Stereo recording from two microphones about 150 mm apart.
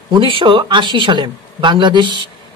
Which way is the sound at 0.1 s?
35° right (ahead or behind).